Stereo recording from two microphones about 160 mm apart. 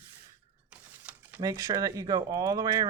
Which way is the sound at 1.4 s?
25° right (ahead or behind).